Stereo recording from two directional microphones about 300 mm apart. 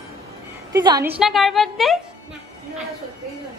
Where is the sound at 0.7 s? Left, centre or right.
Centre.